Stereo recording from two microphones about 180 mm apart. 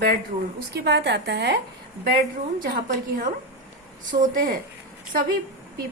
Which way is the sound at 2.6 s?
55° right (ahead or behind).